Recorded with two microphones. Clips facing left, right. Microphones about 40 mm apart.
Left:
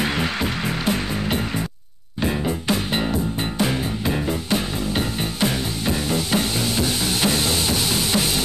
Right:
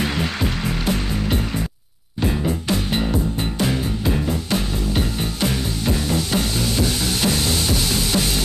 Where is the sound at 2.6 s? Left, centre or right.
Centre.